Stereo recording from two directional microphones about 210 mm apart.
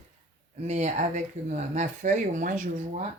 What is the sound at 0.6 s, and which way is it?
Speech, 35° right (ahead or behind).